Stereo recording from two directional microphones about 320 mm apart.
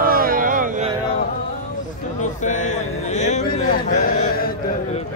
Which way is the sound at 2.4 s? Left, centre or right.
Left.